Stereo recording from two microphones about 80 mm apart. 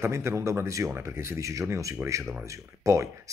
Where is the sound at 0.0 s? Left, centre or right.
Right.